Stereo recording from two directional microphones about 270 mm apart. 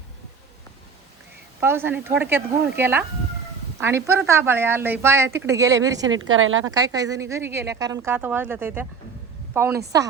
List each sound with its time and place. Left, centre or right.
1.6 s speech: centre
6.1 s a woman's voice: right
6.7 s speech: centre